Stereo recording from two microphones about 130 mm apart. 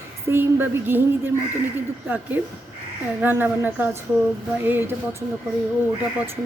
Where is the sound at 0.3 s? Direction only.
15° right (ahead or behind).